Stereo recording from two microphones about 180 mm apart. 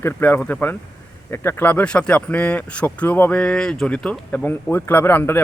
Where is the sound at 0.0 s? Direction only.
10° left (ahead or behind).